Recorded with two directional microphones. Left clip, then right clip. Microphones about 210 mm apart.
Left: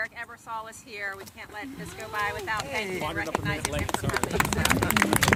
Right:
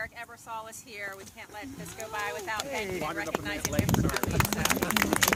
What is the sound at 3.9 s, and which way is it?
Speech, 50° right (ahead or behind).